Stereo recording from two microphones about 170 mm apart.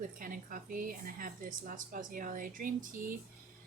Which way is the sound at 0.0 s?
55° right (ahead or behind).